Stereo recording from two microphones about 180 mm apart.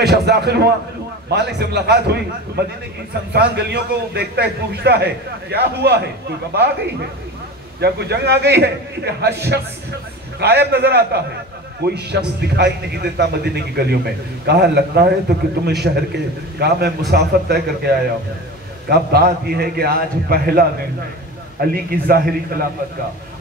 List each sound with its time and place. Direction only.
0.0 s a man's voice: 65° right (ahead or behind)
7.8 s a man's voice: 65° right (ahead or behind)